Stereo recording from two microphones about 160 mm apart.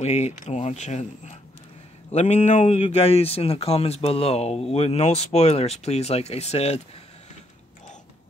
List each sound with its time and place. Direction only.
0.0 s speech: 45° left (ahead or behind)